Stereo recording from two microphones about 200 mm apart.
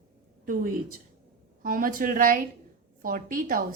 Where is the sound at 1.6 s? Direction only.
45° right (ahead or behind).